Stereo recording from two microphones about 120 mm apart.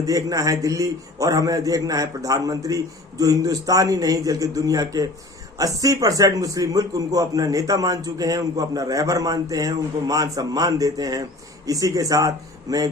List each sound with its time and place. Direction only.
0.0 s speech: 30° right (ahead or behind)